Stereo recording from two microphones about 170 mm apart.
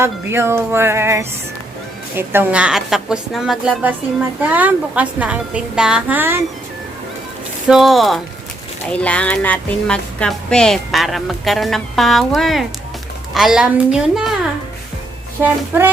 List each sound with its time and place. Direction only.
0.0 s a woman's voice: 15° right (ahead or behind)
7.7 s speech: centre (ahead or behind)